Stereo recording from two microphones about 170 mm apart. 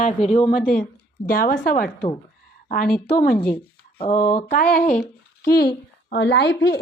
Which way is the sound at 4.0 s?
40° left (ahead or behind).